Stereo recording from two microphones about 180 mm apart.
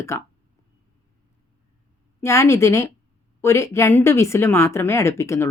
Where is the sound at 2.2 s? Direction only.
15° left (ahead or behind).